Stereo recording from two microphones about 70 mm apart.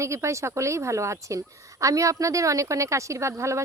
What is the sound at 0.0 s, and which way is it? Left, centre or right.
A woman's voice, right.